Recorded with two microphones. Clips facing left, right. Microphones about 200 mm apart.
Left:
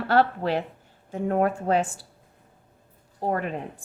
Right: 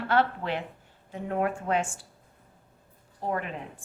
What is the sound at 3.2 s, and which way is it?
Speech, 40° left (ahead or behind).